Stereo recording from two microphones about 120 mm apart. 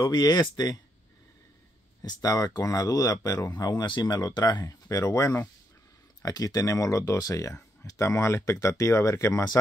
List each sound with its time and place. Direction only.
0.0 s speech: 35° left (ahead or behind)
2.0 s speech: 30° left (ahead or behind)